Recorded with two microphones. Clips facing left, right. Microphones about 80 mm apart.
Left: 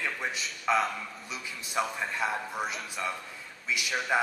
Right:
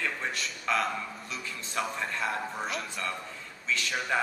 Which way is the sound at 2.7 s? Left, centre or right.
Centre.